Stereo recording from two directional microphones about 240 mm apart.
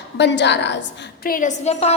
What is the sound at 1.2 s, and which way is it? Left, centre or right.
Speech, left.